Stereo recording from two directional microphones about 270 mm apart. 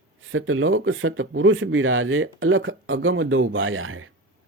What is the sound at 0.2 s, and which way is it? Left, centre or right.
Speech, right.